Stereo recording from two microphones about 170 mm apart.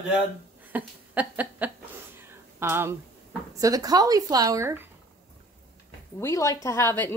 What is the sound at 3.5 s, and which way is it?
A woman's voice, 20° right (ahead or behind).